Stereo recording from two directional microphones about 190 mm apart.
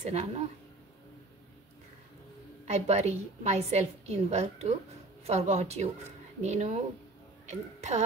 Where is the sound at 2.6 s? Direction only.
35° right (ahead or behind).